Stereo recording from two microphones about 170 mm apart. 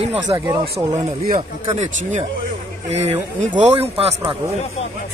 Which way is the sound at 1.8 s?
45° right (ahead or behind).